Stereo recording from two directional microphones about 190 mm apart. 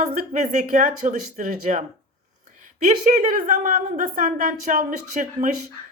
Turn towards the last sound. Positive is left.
turn(degrees=-40)  # may be behind; listen again after turning